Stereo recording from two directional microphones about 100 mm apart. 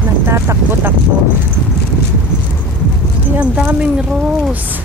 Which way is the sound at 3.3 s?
15° right (ahead or behind).